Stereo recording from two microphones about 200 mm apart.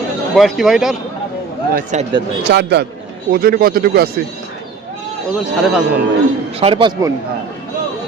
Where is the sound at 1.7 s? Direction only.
40° right (ahead or behind).